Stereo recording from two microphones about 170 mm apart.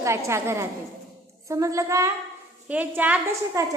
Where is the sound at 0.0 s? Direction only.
15° right (ahead or behind).